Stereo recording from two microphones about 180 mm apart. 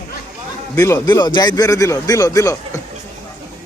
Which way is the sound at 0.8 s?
15° left (ahead or behind).